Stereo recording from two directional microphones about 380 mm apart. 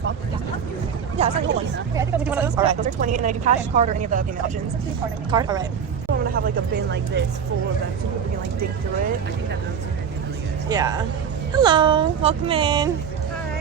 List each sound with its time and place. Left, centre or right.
1.1 s speech: centre
2.0 s speech: centre
2.8 s speech: centre
6.3 s speech: right
10.7 s speech: centre